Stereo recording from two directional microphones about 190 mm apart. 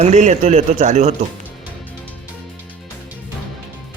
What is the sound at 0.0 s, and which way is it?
Speech, 35° right (ahead or behind).